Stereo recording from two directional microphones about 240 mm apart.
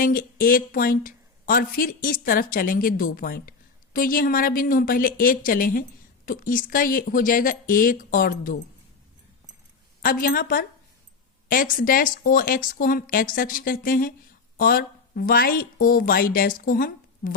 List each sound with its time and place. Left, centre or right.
0.0 s speech: left
10.0 s a woman's voice: left